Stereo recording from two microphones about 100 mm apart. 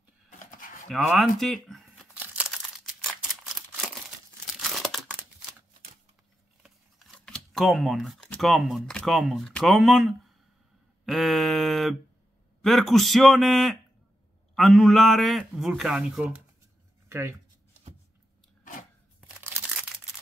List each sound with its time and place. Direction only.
1.1 s speech: centre (ahead or behind)
2.1 s crumpling: 15° right (ahead or behind)
4.5 s crumpling: centre (ahead or behind)
7.2 s computer keyboard: 5° left (ahead or behind)
8.4 s a man's voice: centre (ahead or behind)
17.1 s speech: 25° right (ahead or behind)
19.4 s a sound: 15° right (ahead or behind)